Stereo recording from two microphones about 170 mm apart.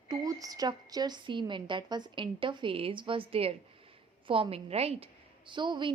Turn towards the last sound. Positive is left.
turn(degrees=-25)  # may be behind; listen again after turning